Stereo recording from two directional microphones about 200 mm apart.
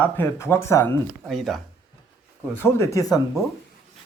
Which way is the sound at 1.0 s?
Centre (ahead or behind).